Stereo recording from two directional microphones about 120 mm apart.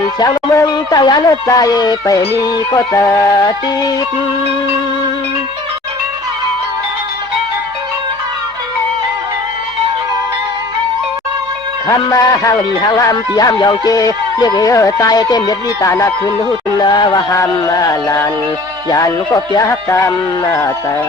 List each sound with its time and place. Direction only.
0.2 s music: 30° left (ahead or behind)
12.0 s speech: 30° left (ahead or behind)
13.0 s music: 30° left (ahead or behind)
18.9 s speech: 30° left (ahead or behind)